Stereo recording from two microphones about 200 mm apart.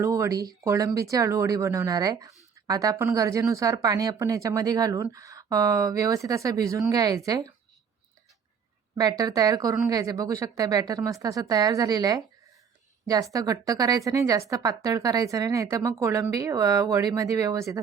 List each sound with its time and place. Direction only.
0.0 s speech: 15° right (ahead or behind)
9.0 s speech: 20° right (ahead or behind)